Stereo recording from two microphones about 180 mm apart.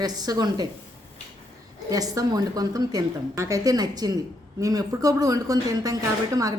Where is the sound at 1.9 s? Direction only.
20° right (ahead or behind).